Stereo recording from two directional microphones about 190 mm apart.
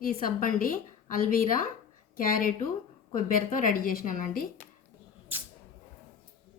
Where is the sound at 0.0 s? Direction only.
45° left (ahead or behind).